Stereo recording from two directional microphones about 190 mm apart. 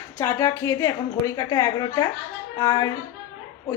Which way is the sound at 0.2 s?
15° left (ahead or behind).